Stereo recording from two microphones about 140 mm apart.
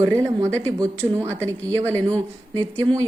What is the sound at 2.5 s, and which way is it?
Speech, 25° right (ahead or behind).